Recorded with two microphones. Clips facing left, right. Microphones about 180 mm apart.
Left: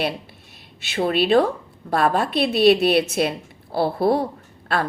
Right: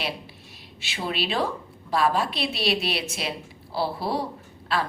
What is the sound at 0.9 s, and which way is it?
A woman's voice, 50° left (ahead or behind).